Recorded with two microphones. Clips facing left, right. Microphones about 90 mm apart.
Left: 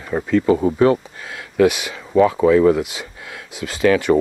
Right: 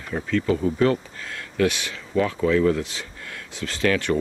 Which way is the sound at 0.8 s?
15° left (ahead or behind).